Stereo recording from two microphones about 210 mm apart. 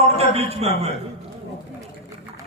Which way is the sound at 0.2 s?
30° right (ahead or behind).